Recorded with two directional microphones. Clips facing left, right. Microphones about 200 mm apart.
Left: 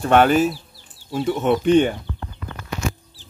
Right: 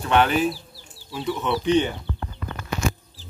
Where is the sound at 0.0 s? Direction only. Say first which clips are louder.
Left 5 dB; 45° left (ahead or behind).